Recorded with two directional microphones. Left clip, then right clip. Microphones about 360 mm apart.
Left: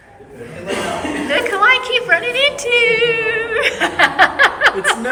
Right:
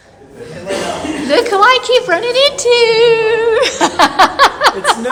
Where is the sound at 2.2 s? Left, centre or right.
Centre.